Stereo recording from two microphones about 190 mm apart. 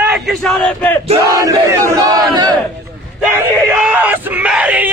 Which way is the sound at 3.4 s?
5° right (ahead or behind).